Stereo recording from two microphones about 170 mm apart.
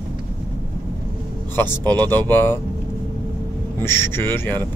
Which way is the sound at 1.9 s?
25° right (ahead or behind).